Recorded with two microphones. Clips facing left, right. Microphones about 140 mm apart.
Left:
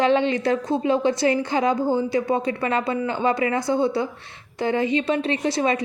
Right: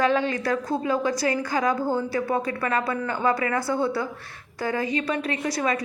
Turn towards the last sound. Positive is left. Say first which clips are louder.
# left 4 dB
turn(degrees=25)  # may be behind; listen again after turning